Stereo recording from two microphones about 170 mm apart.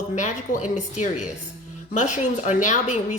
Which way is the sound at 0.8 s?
45° left (ahead or behind).